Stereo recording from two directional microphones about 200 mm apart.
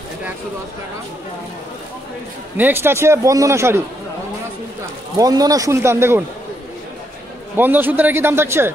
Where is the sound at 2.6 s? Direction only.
10° right (ahead or behind).